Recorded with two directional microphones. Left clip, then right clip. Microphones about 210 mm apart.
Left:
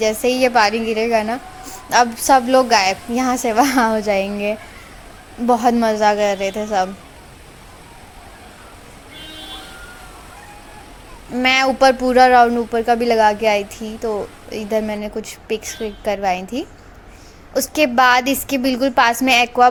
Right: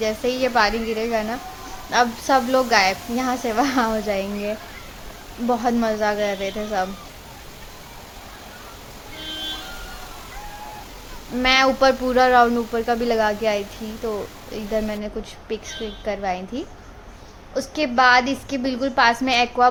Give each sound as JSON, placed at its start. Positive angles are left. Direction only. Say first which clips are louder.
{"t": 0.0, "sound": "a man's voice", "louder": "left 6 dB", "side_deg": 15}
{"t": 11.3, "sound": "a man's voice", "louder": "left 2 dB", "side_deg": 10}